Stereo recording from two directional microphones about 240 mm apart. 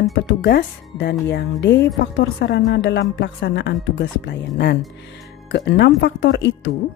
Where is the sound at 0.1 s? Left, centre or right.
Left.